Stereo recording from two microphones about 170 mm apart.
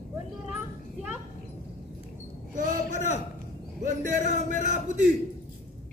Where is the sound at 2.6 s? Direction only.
45° right (ahead or behind).